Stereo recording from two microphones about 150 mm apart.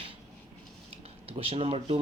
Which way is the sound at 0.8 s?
40° right (ahead or behind).